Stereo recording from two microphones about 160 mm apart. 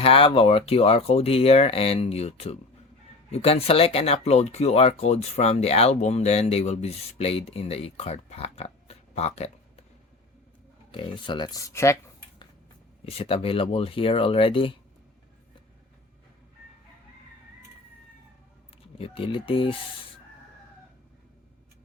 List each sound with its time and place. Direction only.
0.0 s speech: 35° left (ahead or behind)
10.9 s speech: 30° left (ahead or behind)
13.1 s speech: 35° left (ahead or behind)
18.9 s speech: 35° left (ahead or behind)